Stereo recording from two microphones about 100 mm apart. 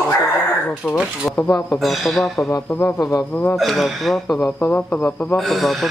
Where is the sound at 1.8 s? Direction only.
Centre (ahead or behind).